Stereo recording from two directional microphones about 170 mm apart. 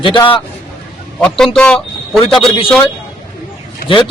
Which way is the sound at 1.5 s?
5° left (ahead or behind).